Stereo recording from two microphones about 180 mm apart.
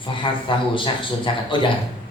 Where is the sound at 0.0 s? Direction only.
25° left (ahead or behind).